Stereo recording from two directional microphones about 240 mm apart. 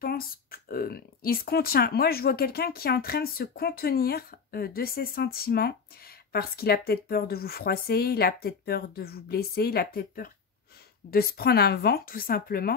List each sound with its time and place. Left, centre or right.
0.0 s speech: left